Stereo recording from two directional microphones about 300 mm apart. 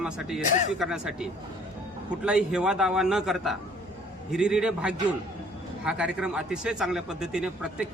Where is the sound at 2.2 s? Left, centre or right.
Centre.